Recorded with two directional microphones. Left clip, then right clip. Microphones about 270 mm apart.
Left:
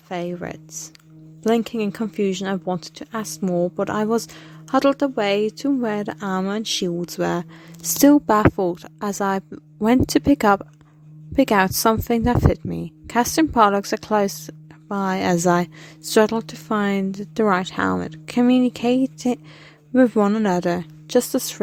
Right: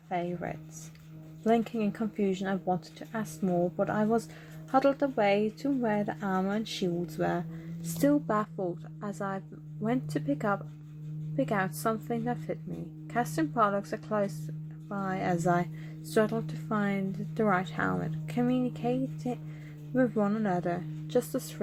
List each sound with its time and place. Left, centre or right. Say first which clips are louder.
0.1 s a woman's voice: left 6 dB; left